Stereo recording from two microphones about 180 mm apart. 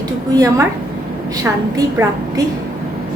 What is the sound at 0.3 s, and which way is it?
Speech, 20° right (ahead or behind).